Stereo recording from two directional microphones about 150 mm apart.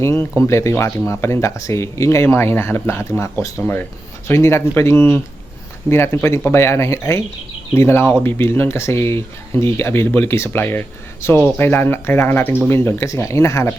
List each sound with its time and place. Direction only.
0.0 s speech: 15° left (ahead or behind)